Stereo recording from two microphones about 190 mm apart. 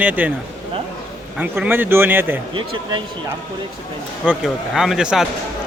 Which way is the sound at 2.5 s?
25° right (ahead or behind).